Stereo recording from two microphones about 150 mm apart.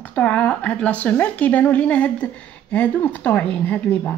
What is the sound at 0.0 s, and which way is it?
Speech, 10° left (ahead or behind).